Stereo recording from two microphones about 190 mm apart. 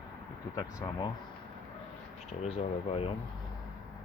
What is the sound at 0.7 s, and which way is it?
Speech, 20° left (ahead or behind).